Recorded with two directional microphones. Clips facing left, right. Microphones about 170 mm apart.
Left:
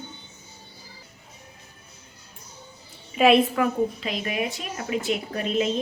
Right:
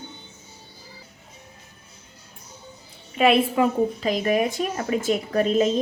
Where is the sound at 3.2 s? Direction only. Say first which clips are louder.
Even; centre (ahead or behind).